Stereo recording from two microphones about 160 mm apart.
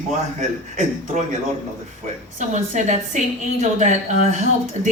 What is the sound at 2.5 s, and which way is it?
A man's voice, 50° right (ahead or behind).